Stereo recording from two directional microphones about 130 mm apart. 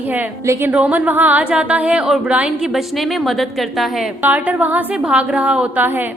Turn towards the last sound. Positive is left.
turn(degrees=-15)  # may be behind; listen again after turning